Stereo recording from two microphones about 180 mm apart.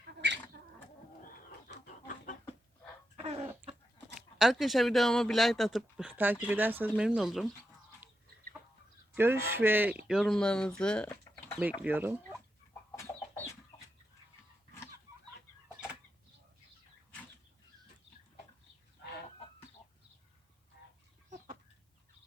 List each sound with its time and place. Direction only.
0.0 s bird: 70° right (ahead or behind)
0.5 s a sound: 65° right (ahead or behind)
1.2 s chicken: 50° left (ahead or behind)
3.2 s chicken: 35° right (ahead or behind)
4.4 s speech: centre (ahead or behind)
9.1 s speech: 10° right (ahead or behind); by 11.5 s 10° left (ahead or behind)
11.8 s speech: 10° right (ahead or behind)
13.0 s chicken: 15° left (ahead or behind)
20.7 s a sound: 65° left (ahead or behind)
21.2 s chicken: 45° right (ahead or behind)